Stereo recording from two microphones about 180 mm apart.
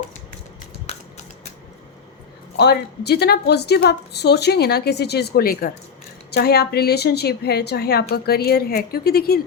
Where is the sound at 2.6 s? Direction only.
65° left (ahead or behind).